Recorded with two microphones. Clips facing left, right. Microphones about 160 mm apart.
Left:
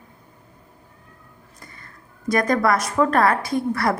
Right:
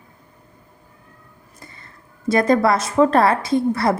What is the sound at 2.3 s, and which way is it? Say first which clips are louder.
A woman's voice: right 3 dB; 25° right (ahead or behind).